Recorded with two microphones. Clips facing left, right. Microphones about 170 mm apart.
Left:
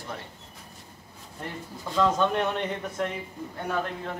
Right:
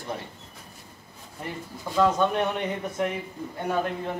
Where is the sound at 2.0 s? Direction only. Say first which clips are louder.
Right 2 dB; 10° right (ahead or behind).